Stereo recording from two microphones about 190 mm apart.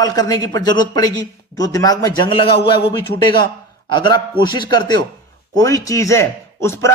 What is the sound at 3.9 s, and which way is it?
A man's voice, 25° left (ahead or behind).